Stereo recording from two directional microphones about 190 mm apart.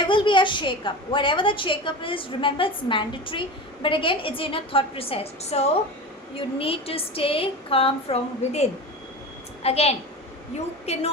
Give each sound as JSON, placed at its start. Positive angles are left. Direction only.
{"t": 0.0, "sound": "a woman's voice", "side_deg": 25}
{"t": 9.6, "sound": "a child's voice", "side_deg": 30}